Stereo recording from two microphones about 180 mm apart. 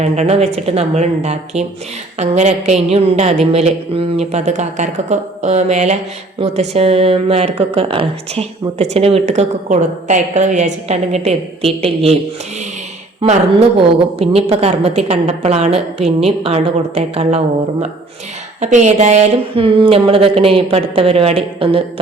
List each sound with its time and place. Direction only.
0.0 s a woman's voice: 35° right (ahead or behind)
13.2 s a woman's voice: 35° right (ahead or behind)